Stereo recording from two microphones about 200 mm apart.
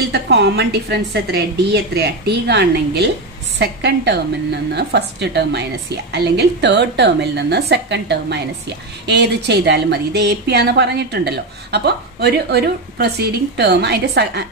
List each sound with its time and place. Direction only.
0.1 s a woman's voice: 55° right (ahead or behind)